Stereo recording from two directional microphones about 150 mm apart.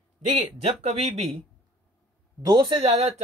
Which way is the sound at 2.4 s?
25° right (ahead or behind).